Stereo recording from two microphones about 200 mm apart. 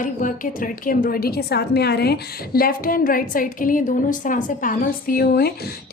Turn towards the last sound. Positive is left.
turn(degrees=50)  # may be behind; listen again after turning